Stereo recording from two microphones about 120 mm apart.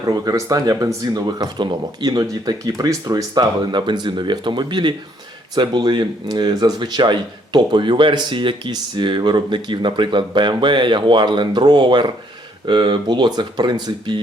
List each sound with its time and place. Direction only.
0.0 s speech: 30° right (ahead or behind)